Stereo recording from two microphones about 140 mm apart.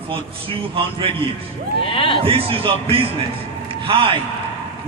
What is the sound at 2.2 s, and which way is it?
A man's voice, 40° right (ahead or behind).